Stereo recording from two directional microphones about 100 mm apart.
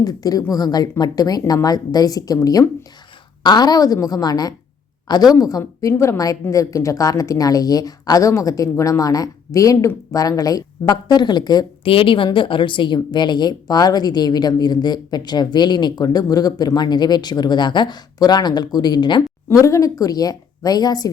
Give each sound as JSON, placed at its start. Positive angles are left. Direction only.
{"t": 0.0, "sound": "a woman's voice", "side_deg": 40}
{"t": 11.9, "sound": "a woman's voice", "side_deg": 60}
{"t": 19.6, "sound": "speech", "side_deg": 30}